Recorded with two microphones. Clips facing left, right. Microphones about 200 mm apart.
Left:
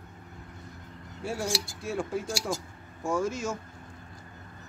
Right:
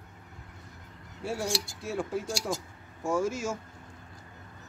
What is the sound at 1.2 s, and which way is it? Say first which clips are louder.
Speech: even; centre (ahead or behind).